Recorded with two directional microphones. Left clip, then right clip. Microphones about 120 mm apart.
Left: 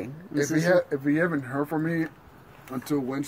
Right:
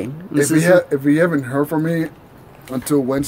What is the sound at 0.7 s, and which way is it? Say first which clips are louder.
Speech: right 8 dB; 30° right (ahead or behind).